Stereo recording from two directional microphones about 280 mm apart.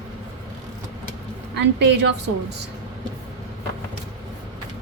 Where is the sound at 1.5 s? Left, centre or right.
Right.